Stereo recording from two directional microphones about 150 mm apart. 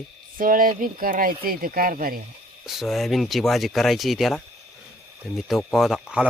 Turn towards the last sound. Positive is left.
turn(degrees=-5)  # may be behind; listen again after turning